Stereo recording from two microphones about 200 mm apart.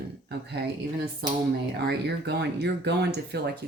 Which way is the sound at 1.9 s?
55° right (ahead or behind).